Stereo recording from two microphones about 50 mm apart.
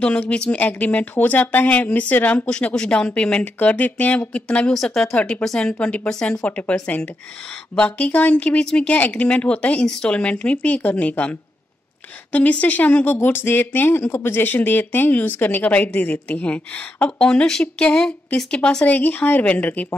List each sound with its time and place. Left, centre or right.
0.0 s speech: centre
3.5 s speech: left
7.7 s speech: left
8.5 s speech: centre
13.1 s speech: left
17.2 s speech: centre
18.9 s speech: left